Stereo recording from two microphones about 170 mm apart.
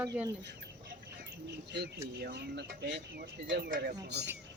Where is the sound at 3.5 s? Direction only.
60° right (ahead or behind).